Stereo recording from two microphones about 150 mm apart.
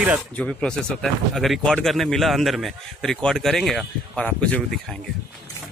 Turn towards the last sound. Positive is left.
turn(degrees=10)  # may be behind; listen again after turning